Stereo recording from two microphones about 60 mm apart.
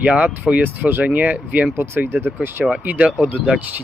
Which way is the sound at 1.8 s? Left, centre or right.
Right.